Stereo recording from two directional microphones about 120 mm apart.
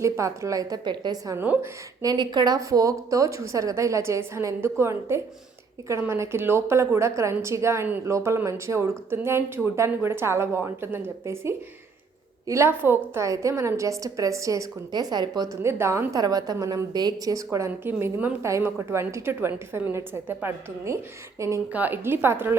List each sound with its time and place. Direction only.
0.0 s a woman's voice: 25° right (ahead or behind)
15.6 s a woman's voice: 20° right (ahead or behind)
16.1 s a woman's voice: 35° right (ahead or behind)
21.7 s a woman's voice: 15° right (ahead or behind)